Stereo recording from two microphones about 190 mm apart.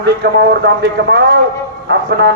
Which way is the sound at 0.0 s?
60° right (ahead or behind).